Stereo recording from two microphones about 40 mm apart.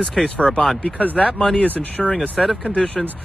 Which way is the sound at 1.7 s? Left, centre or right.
Left.